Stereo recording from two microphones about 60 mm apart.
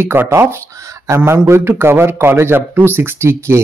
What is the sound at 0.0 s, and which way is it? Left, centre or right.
A man's voice, right.